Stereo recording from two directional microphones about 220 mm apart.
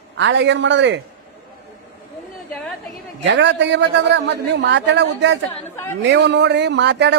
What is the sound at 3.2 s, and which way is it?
A man's voice, 55° right (ahead or behind).